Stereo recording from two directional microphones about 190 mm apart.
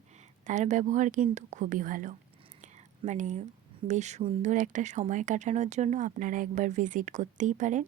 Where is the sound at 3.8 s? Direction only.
40° right (ahead or behind).